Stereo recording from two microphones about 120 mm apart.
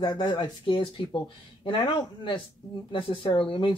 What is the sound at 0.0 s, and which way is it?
Speech, 40° left (ahead or behind).